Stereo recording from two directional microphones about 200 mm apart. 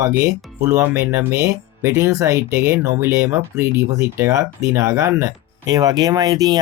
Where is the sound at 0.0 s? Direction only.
15° right (ahead or behind).